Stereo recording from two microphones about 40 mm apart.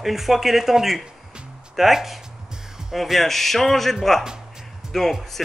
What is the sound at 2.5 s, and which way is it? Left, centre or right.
Music, centre.